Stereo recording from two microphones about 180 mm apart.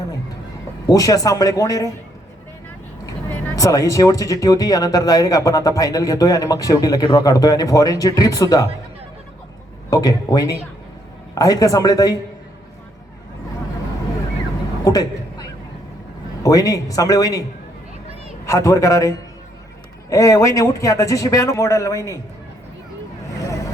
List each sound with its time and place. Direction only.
0.9 s speech: 20° left (ahead or behind)
3.5 s speech: 20° left (ahead or behind)
9.9 s speech: 20° left (ahead or behind)
14.8 s a sound: 20° left (ahead or behind)
16.4 s speech: 20° left (ahead or behind)
18.4 s a man's voice: 15° left (ahead or behind)